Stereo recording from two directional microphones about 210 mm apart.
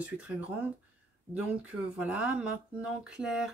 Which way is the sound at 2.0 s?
5° right (ahead or behind).